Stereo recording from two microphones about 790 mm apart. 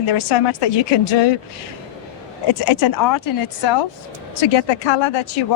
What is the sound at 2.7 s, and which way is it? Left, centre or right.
Speech, left.